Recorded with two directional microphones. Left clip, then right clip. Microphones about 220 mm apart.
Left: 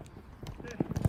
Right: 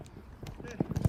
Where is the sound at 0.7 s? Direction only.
Centre (ahead or behind).